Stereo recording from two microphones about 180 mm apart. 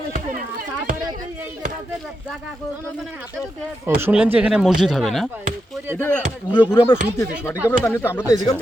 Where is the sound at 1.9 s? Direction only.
Centre (ahead or behind).